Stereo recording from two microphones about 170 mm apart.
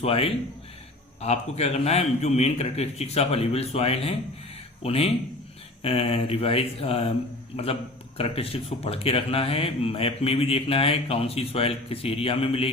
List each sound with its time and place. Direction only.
0.0 s speech: 35° left (ahead or behind)